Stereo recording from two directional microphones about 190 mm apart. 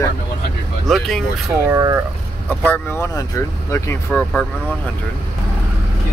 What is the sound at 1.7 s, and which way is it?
Speech, 20° right (ahead or behind).